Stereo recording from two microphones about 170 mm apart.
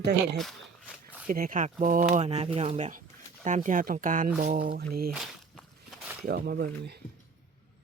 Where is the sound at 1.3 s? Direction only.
55° right (ahead or behind).